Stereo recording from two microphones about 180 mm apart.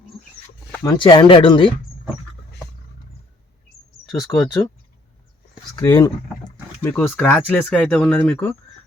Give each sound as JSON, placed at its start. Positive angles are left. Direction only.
{"t": 0.7, "sound": "a sound", "side_deg": 10}
{"t": 0.9, "sound": "speech", "side_deg": 25}
{"t": 4.3, "sound": "speech", "side_deg": 20}
{"t": 5.7, "sound": "speech", "side_deg": 25}
{"t": 6.8, "sound": "speech", "side_deg": 10}
{"t": 7.2, "sound": "speech", "side_deg": 0}